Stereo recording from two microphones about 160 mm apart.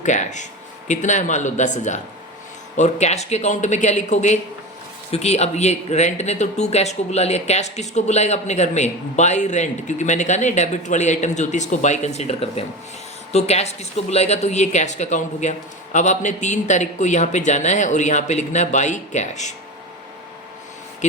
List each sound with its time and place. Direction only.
0.0 s speech: 50° left (ahead or behind)
21.0 s speech: 45° left (ahead or behind)